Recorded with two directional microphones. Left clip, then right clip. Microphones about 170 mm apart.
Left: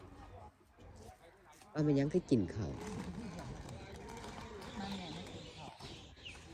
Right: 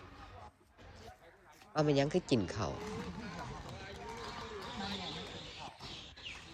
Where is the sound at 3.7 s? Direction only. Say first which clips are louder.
Right 4 dB; 30° left (ahead or behind).